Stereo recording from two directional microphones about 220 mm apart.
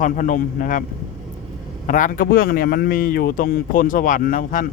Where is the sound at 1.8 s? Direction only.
35° left (ahead or behind).